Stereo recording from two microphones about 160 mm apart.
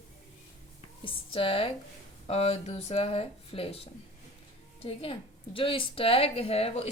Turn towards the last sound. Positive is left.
turn(degrees=40)  # may be behind; listen again after turning